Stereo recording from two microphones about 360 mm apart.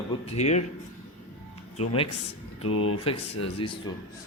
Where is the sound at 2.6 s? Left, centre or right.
Left.